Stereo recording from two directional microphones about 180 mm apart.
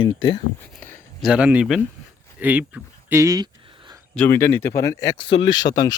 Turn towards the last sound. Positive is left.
turn(degrees=20)  # may be behind; listen again after turning